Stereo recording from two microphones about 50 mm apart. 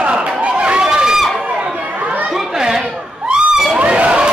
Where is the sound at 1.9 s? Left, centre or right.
Right.